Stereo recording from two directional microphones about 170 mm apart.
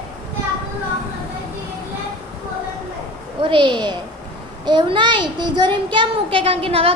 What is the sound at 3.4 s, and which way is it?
A woman's voice, 30° right (ahead or behind).